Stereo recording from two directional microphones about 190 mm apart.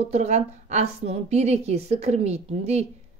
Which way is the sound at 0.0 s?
35° right (ahead or behind).